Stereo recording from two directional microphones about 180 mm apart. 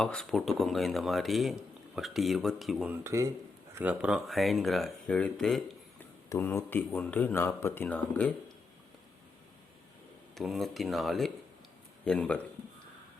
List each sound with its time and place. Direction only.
0.0 s speech: 5° left (ahead or behind)
6.2 s speech: 15° left (ahead or behind)
10.3 s speech: centre (ahead or behind)